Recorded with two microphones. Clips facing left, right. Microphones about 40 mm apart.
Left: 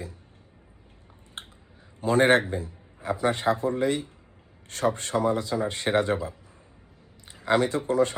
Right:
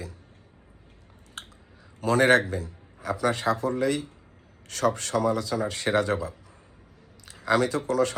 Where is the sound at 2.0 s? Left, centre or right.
Left.